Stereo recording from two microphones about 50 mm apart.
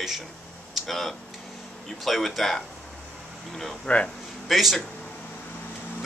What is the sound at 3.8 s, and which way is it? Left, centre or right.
Speech, left.